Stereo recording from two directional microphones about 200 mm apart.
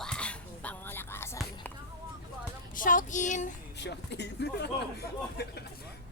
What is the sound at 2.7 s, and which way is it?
Child singing, 40° left (ahead or behind).